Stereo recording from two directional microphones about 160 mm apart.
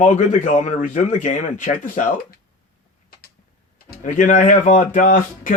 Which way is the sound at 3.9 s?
55° left (ahead or behind).